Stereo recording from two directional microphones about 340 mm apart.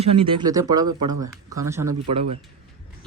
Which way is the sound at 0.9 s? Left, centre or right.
Right.